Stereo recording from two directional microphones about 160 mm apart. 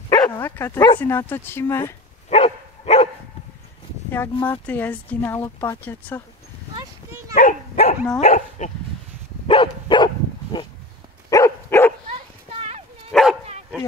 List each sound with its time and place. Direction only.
0.1 s speech: 20° left (ahead or behind)
2.2 s dog: 40° left (ahead or behind)
4.1 s speech: 15° left (ahead or behind)
6.8 s a sound: 20° right (ahead or behind)
7.3 s dog: 55° left (ahead or behind)
8.2 s speech: 45° left (ahead or behind)
9.5 s dog: 30° left (ahead or behind)
12.1 s dog: 40° right (ahead or behind)
13.1 s dog: centre (ahead or behind)